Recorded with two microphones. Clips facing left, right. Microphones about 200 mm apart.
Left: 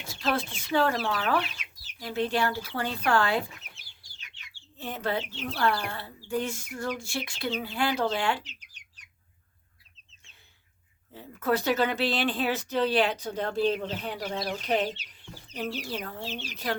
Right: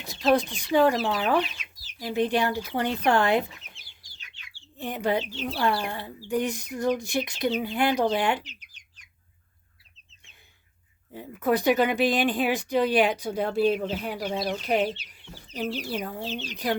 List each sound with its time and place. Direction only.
0.1 s speech: 20° right (ahead or behind)
4.8 s speech: 15° right (ahead or behind)
11.1 s speech: 15° right (ahead or behind)